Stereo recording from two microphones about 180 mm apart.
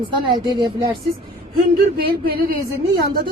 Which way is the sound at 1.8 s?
55° right (ahead or behind).